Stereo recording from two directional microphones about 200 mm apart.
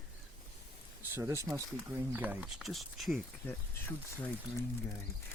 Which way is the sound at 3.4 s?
10° left (ahead or behind).